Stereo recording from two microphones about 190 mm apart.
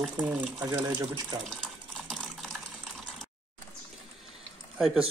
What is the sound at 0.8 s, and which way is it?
Speech, 20° right (ahead or behind).